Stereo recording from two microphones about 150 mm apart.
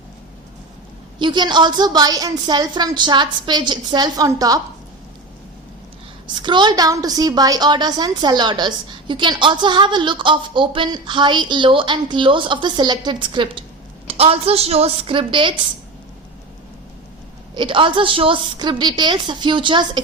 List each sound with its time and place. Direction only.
1.2 s a woman's voice: 30° right (ahead or behind)
6.2 s a woman's voice: 30° right (ahead or behind)
17.5 s a woman's voice: 30° right (ahead or behind)